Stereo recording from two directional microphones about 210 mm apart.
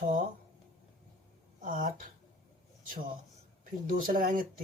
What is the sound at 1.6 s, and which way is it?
Speech, 40° right (ahead or behind).